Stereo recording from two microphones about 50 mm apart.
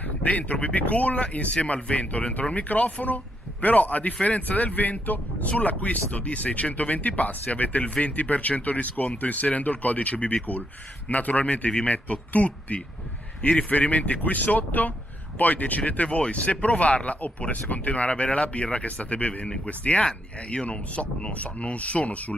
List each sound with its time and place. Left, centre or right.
0.2 s speech: left
19.4 s speech: centre
19.8 s speech: left